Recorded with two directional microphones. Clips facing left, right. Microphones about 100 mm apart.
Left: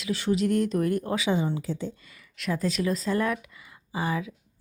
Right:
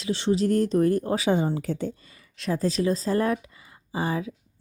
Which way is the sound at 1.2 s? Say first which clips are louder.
Right 3 dB; 45° right (ahead or behind).